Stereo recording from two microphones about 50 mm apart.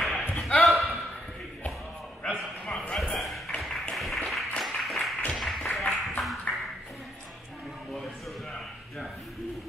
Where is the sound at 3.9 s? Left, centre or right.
Centre.